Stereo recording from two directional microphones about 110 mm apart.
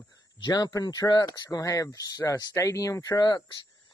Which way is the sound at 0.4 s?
35° left (ahead or behind).